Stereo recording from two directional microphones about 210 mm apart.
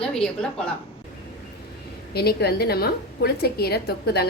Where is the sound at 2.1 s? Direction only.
50° left (ahead or behind).